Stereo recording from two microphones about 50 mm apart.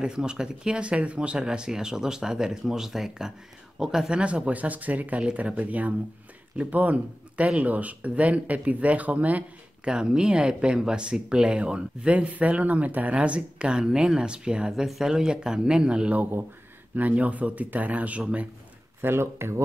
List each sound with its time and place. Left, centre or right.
0.0 s speech: centre
4.2 s speech: right
9.8 s speech: centre
14.7 s speech: centre
16.9 s speech: right
18.9 s speech: right